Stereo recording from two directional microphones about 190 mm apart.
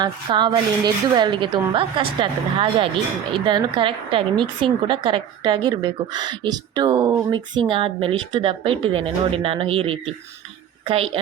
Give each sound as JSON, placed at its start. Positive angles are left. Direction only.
{"t": 0.0, "sound": "a woman's voice", "side_deg": -25}